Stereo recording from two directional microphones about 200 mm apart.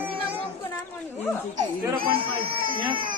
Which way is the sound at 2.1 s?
45° right (ahead or behind).